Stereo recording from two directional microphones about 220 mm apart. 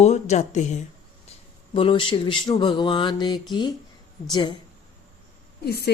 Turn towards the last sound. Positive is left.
turn(degrees=45)  # may be behind; listen again after turning